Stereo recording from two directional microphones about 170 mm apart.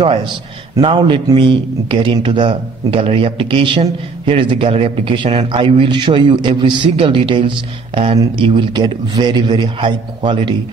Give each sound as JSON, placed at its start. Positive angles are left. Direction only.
{"t": 0.0, "sound": "a man's voice", "side_deg": -30}